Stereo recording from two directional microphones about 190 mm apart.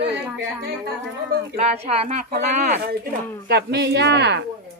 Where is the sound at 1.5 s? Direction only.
35° right (ahead or behind).